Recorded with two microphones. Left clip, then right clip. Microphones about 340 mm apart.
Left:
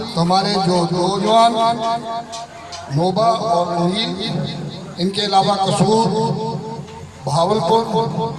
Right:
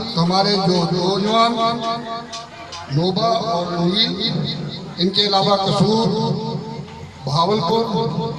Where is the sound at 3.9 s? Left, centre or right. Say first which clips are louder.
Right 3 dB; left.